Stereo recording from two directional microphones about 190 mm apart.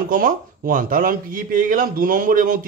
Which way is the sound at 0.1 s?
45° right (ahead or behind).